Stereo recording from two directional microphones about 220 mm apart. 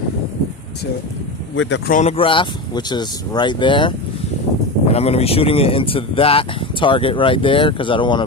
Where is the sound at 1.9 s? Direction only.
30° left (ahead or behind).